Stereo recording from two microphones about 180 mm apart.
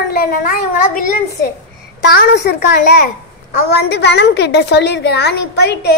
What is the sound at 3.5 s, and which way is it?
A woman's voice, 65° left (ahead or behind).